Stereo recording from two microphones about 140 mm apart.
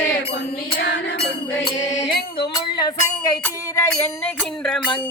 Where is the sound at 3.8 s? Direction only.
5° left (ahead or behind).